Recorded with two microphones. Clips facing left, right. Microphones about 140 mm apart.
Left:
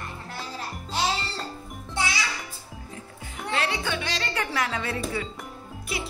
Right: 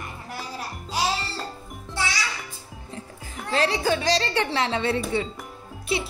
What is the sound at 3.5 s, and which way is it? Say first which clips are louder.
Speech: right 6 dB; 35° right (ahead or behind).